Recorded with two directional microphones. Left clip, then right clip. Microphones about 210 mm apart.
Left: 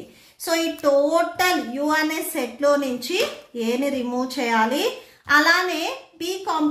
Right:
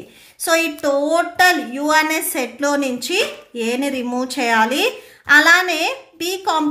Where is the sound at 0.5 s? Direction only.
40° right (ahead or behind).